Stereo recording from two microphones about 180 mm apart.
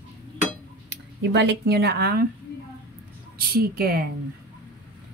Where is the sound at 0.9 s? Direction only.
70° right (ahead or behind).